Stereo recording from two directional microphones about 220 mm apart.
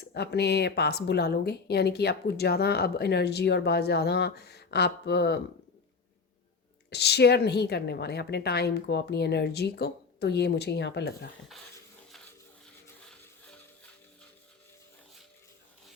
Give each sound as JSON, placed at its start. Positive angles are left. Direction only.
{"t": 0.0, "sound": "speech", "side_deg": 50}
{"t": 6.9, "sound": "speech", "side_deg": 50}